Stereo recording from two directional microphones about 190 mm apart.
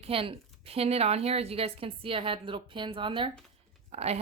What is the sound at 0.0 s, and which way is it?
Speech, 30° right (ahead or behind).